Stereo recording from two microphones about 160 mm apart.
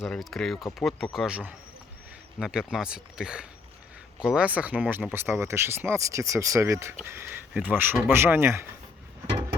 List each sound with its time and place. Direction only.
0.0 s speech: centre (ahead or behind); by 8.6 s 15° right (ahead or behind)